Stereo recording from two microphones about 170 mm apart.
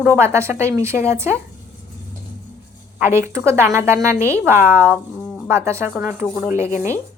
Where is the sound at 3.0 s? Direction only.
15° right (ahead or behind).